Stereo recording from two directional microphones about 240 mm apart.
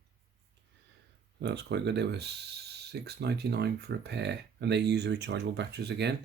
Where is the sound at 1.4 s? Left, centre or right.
Right.